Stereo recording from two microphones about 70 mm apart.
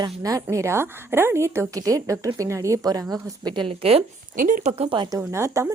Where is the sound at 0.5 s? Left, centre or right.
Right.